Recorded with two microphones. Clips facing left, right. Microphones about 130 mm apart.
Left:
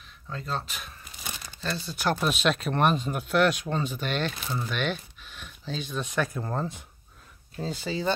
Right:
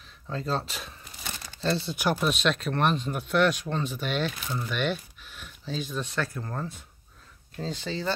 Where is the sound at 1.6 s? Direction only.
25° right (ahead or behind).